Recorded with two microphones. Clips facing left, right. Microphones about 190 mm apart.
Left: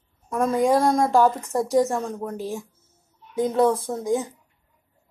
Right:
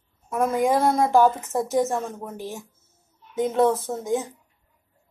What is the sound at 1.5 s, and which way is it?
Speech, 20° right (ahead or behind).